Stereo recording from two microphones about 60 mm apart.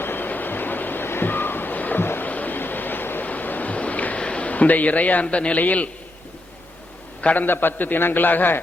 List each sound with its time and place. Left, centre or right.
0.0 s vehicle: left
5.2 s a man's voice: centre
7.2 s a man's voice: left
7.4 s a man's voice: left